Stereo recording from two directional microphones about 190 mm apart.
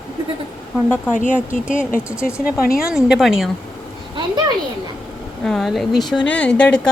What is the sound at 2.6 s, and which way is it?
Speech, 50° left (ahead or behind).